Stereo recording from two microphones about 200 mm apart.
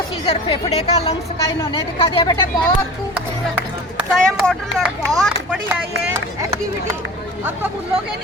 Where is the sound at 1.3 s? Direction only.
15° left (ahead or behind).